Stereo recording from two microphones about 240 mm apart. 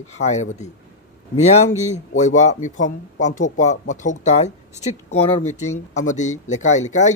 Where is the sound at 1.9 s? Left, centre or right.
Left.